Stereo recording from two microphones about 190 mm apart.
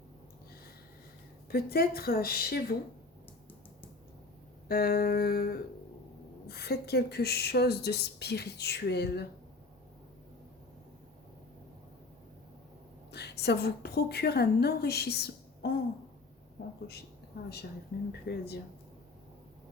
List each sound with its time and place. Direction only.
1.5 s a woman's voice: 55° left (ahead or behind)
4.7 s a woman's voice: 55° left (ahead or behind)
13.1 s a woman's voice: 60° left (ahead or behind)
16.8 s speech: 55° left (ahead or behind)